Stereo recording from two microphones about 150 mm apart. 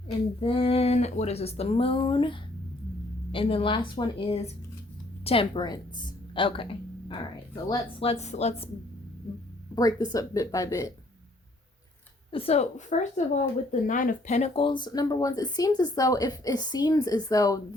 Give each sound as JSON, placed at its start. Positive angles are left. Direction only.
{"t": 0.3, "sound": "a woman's voice", "side_deg": 35}
{"t": 8.0, "sound": "a woman's voice", "side_deg": 45}
{"t": 9.7, "sound": "speech", "side_deg": 25}
{"t": 12.3, "sound": "a woman's voice", "side_deg": 40}